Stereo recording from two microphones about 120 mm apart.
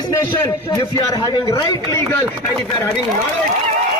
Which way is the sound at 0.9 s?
30° left (ahead or behind).